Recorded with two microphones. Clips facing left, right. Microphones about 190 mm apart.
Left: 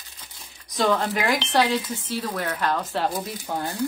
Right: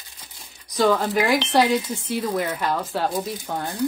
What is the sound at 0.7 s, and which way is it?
Speech, centre (ahead or behind).